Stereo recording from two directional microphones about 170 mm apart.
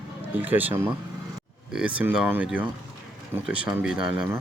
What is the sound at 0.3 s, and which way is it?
Speech, 10° right (ahead or behind).